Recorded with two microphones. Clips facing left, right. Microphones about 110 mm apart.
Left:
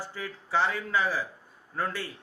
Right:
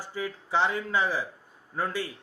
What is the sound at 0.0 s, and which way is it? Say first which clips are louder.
Speech: right 4 dB; 15° right (ahead or behind).